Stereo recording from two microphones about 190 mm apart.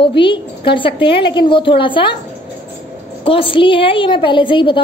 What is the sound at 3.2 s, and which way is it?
A woman's voice, 30° left (ahead or behind).